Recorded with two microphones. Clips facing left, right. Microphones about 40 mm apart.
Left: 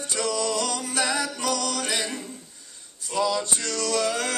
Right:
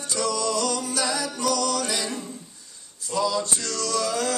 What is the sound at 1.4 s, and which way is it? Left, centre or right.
Music, left.